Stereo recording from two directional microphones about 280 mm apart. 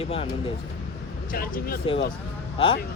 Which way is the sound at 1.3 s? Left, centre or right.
Left.